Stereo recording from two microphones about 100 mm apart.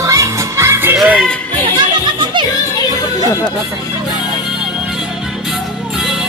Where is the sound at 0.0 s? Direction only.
30° right (ahead or behind).